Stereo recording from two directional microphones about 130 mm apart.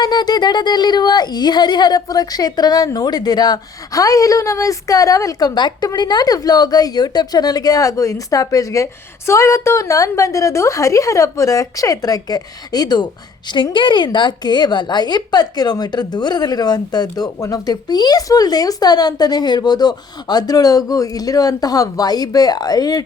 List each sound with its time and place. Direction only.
0.0 s a woman's voice: 30° left (ahead or behind)